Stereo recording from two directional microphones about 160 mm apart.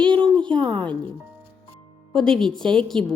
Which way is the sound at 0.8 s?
10° left (ahead or behind).